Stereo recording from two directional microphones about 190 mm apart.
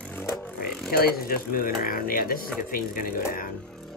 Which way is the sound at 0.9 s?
55° left (ahead or behind).